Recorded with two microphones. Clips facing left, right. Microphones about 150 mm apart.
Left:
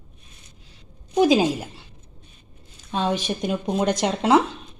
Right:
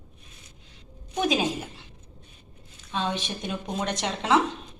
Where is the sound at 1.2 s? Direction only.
35° left (ahead or behind).